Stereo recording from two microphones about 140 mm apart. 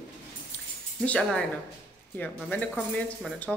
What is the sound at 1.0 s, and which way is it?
Speech, 5° left (ahead or behind).